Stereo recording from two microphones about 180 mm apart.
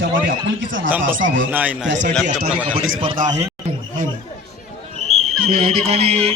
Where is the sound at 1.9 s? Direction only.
85° right.